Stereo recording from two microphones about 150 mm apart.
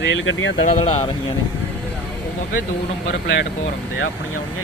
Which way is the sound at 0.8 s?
35° left (ahead or behind).